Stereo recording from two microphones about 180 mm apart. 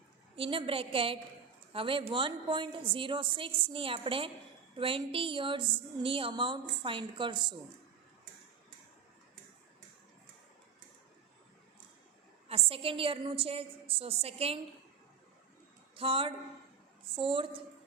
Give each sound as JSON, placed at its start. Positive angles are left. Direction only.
{"t": 0.3, "sound": "a woman's voice", "side_deg": -30}
{"t": 12.5, "sound": "a woman's voice", "side_deg": -35}
{"t": 16.0, "sound": "a woman's voice", "side_deg": -30}